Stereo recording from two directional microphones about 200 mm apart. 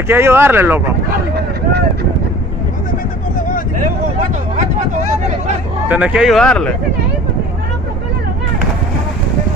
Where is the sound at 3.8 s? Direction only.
35° right (ahead or behind).